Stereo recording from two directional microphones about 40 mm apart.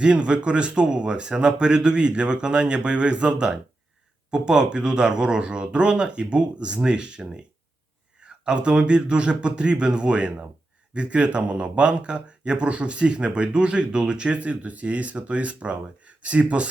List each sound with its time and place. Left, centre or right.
0.0 s speech: right